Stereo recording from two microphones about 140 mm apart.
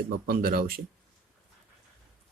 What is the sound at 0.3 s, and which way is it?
Speech, 90° right.